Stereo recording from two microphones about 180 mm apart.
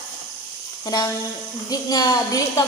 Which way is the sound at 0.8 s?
20° left (ahead or behind).